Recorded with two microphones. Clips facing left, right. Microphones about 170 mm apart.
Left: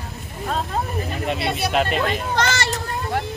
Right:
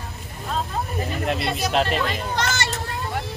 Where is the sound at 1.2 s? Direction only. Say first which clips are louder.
Left 1 dB; centre (ahead or behind).